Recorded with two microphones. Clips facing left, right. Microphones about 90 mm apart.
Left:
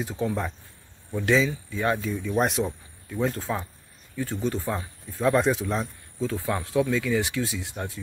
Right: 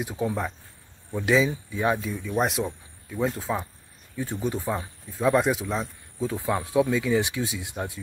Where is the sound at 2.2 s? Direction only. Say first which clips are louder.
Left 1 dB; centre (ahead or behind).